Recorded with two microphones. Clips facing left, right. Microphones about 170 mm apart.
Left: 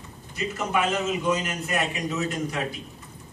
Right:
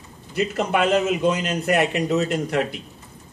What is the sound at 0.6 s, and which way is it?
Speech, 65° right (ahead or behind).